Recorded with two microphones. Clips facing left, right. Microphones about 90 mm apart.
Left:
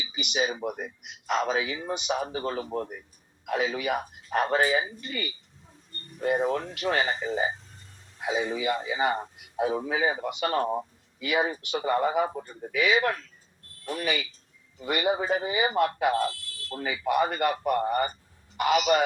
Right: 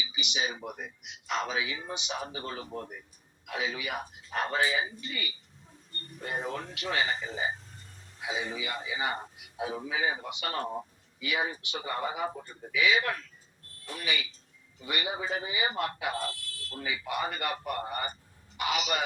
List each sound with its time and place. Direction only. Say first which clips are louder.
0.0 s speech: left 5 dB; 50° left (ahead or behind)